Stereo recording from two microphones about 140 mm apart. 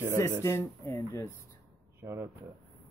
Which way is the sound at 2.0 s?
20° right (ahead or behind).